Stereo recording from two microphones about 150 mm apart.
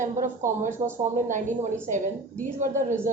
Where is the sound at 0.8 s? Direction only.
40° right (ahead or behind).